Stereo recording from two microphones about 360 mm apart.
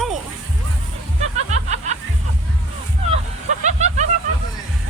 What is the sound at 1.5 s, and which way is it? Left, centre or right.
Music, centre.